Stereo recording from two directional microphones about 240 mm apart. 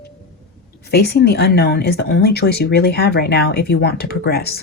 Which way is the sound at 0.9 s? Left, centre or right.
Left.